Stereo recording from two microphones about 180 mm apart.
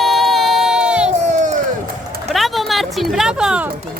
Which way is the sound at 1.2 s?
40° right (ahead or behind).